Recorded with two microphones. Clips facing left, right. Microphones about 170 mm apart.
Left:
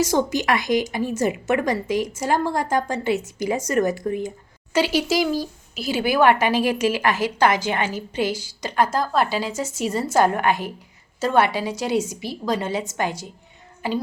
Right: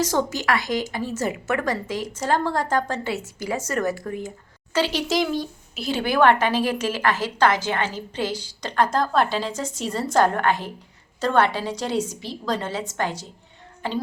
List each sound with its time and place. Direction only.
0.0 s speech: 15° left (ahead or behind)